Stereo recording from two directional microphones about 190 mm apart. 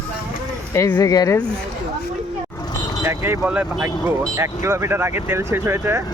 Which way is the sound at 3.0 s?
15° right (ahead or behind).